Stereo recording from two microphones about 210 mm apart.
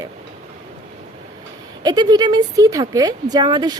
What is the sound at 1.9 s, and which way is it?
Speech, 20° right (ahead or behind).